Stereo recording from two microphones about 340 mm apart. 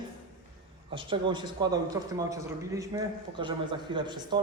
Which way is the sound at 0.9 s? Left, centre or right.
Centre.